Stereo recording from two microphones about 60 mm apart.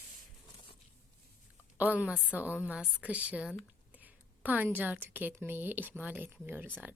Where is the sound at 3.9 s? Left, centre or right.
Right.